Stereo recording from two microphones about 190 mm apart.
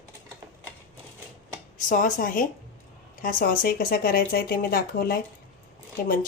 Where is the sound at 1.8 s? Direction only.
45° left (ahead or behind).